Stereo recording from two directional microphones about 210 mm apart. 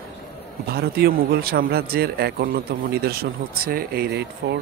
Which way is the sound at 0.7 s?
50° right (ahead or behind).